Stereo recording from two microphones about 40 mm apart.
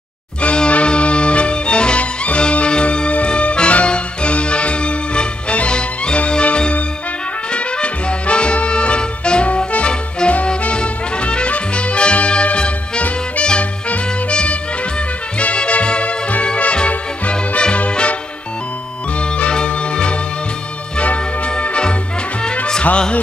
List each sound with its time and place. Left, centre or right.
0.4 s music: left
13.5 s swing music: left
14.3 s music: left
19.1 s music: left
21.5 s music: left